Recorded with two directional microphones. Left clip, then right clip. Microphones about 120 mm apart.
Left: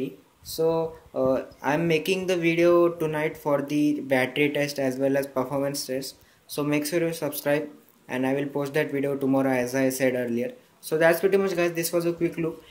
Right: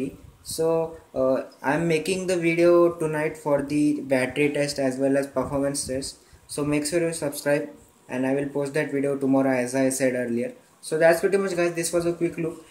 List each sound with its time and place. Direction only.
0.6 s speech: 10° left (ahead or behind)
1.2 s speech: 20° left (ahead or behind)